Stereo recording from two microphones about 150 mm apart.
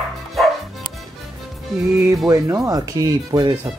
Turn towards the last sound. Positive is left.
turn(degrees=-25)  # may be behind; listen again after turning